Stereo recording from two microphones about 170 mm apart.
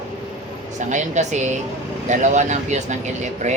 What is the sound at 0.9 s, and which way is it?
Speech, 45° right (ahead or behind).